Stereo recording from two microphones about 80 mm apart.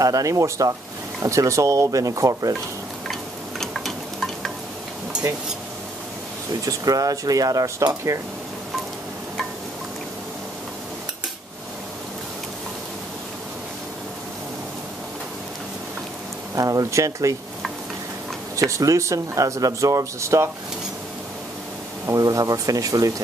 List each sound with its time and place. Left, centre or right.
0.0 s speech: right
3.1 s a sound: centre
6.6 s speech: right
16.5 s speech: right
18.6 s speech: right
22.0 s speech: right